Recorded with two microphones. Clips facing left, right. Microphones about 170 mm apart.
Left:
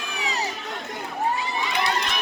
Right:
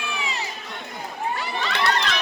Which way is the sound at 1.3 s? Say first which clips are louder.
Even; 70° right (ahead or behind).